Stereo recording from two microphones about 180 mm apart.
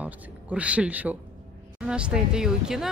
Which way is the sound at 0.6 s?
5° right (ahead or behind).